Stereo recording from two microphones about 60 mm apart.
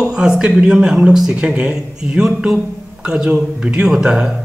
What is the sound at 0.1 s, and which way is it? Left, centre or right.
Speech, centre.